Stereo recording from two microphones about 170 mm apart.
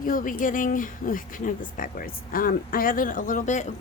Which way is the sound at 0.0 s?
55° left (ahead or behind).